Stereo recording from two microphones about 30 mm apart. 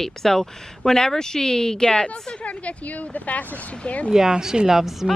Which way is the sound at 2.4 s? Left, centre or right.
Left.